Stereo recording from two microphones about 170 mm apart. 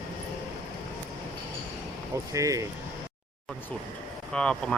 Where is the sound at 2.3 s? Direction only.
20° right (ahead or behind).